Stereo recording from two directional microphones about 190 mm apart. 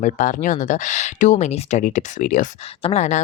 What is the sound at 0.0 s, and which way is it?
Speech, 45° left (ahead or behind).